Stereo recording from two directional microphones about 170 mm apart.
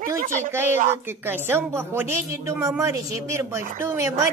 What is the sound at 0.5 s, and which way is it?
A woman's voice, 15° right (ahead or behind).